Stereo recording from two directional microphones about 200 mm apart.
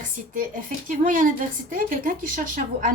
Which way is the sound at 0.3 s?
40° right (ahead or behind).